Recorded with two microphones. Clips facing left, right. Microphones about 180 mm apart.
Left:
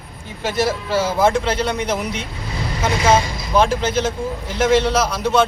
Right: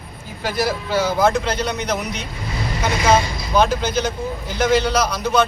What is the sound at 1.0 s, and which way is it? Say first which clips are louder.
Speech: even; 25° left (ahead or behind).